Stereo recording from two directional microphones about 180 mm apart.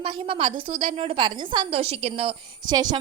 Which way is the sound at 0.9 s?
30° right (ahead or behind).